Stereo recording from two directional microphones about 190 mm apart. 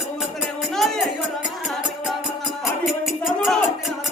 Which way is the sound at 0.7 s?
Centre (ahead or behind).